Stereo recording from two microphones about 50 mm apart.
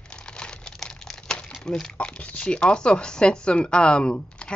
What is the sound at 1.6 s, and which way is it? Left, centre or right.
Speech, centre.